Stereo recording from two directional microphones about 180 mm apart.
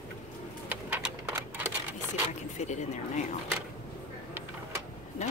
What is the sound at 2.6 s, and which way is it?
Speech, 40° left (ahead or behind).